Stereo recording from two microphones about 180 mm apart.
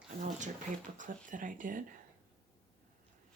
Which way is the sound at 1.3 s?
45° right (ahead or behind).